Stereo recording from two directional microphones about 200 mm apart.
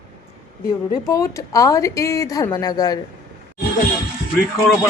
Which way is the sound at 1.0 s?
15° left (ahead or behind).